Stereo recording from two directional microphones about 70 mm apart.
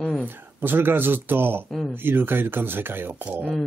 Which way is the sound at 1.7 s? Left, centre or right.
Centre.